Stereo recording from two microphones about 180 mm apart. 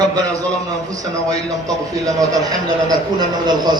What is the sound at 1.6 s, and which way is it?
A man's voice, 20° right (ahead or behind).